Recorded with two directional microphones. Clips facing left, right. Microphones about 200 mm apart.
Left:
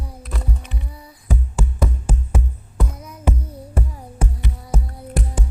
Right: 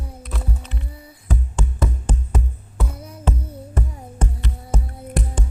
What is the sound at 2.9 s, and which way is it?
Music, 30° right (ahead or behind).